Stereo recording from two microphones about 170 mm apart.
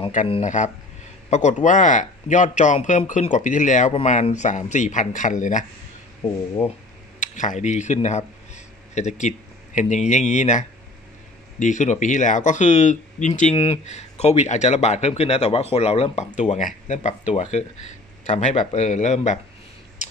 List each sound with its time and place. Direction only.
0.3 s speech: 45° left (ahead or behind)
7.2 s speech: 45° left (ahead or behind)
11.6 s speech: 45° left (ahead or behind)
16.3 s speech: 45° left (ahead or behind)